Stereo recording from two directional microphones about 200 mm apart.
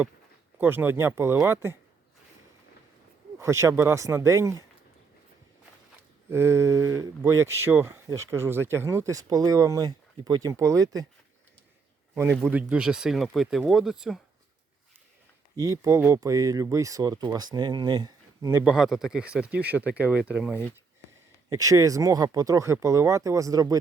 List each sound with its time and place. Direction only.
0.6 s speech: 10° right (ahead or behind)
3.3 s speech: 15° right (ahead or behind)
6.3 s speech: 15° right (ahead or behind)
12.1 s speech: 10° right (ahead or behind)
15.5 s speech: 15° right (ahead or behind)